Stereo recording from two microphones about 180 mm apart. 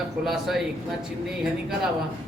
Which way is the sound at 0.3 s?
Centre (ahead or behind).